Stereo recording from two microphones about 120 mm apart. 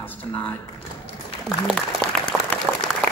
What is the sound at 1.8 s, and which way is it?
Applause, 5° left (ahead or behind).